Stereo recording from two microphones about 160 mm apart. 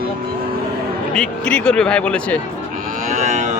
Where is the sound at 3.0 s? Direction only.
45° right (ahead or behind).